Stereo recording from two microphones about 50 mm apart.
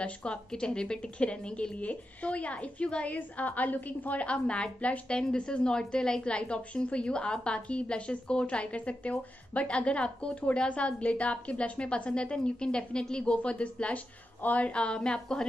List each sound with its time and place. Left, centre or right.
0.0 s a woman's voice: left
3.2 s a woman's voice: left; by 15.4 s centre